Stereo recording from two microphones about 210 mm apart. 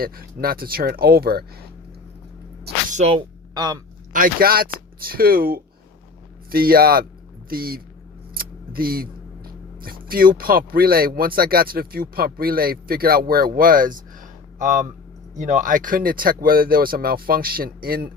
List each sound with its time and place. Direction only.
0.0 s speech: 45° right (ahead or behind)
2.9 s speech: 30° right (ahead or behind)
4.1 s speech: 45° right (ahead or behind)